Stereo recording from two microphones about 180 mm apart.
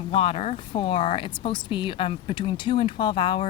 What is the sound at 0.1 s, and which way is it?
Speech, 30° left (ahead or behind).